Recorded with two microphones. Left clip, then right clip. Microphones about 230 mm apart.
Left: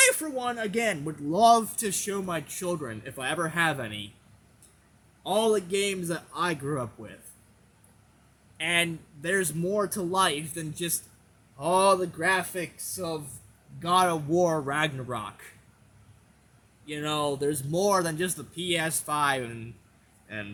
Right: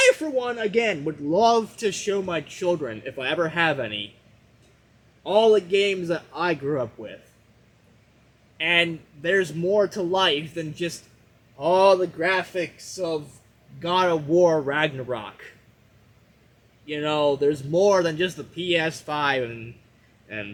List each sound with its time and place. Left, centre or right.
0.0 s a man's voice: centre
5.2 s a man's voice: centre
8.5 s a man's voice: centre
16.8 s a man's voice: centre